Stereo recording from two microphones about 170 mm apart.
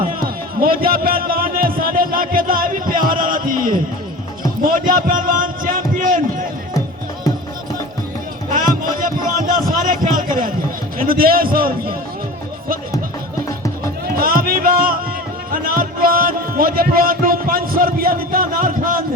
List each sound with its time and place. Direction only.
0.0 s music: 55° right (ahead or behind)
4.6 s a sound: 55° right (ahead or behind)
8.4 s music: 50° right (ahead or behind)
10.9 s a man's voice: 60° right (ahead or behind)
14.1 s music: 60° right (ahead or behind)